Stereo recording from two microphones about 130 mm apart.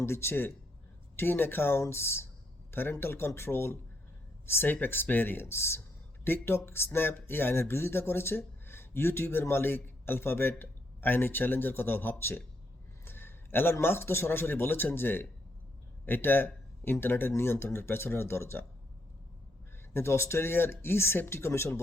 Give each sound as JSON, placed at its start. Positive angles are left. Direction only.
{"t": 0.0, "sound": "speech", "side_deg": 20}
{"t": 19.9, "sound": "speech", "side_deg": 20}